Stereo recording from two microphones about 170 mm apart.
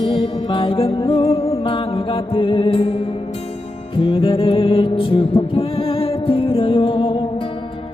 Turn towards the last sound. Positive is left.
turn(degrees=30)  # may be behind; listen again after turning